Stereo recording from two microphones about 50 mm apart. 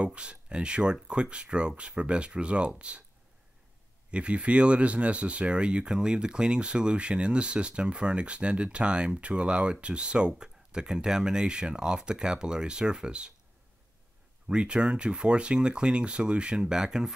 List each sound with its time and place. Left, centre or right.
0.0 s speech: right
4.1 s speech: right
14.5 s speech: centre